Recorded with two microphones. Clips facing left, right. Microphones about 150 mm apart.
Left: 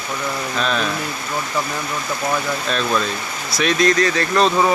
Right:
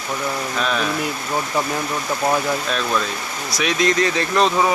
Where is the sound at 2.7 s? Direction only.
10° right (ahead or behind).